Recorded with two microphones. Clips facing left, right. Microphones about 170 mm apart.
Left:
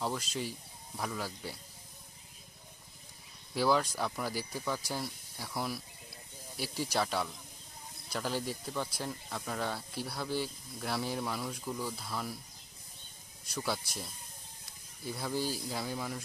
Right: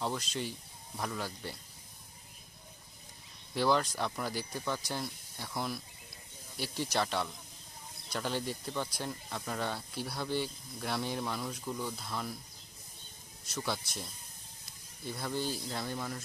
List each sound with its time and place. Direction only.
0.0 s speech: 5° left (ahead or behind)
3.5 s speech: 5° left (ahead or behind)
13.6 s speech: 5° left (ahead or behind)